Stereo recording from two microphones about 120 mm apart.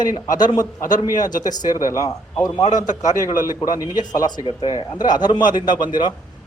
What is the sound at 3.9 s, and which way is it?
A man's voice, 35° left (ahead or behind).